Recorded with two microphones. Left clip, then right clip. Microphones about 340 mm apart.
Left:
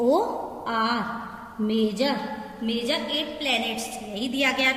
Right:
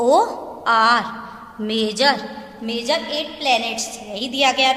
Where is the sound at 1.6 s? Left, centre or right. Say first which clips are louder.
Right 7 dB; centre.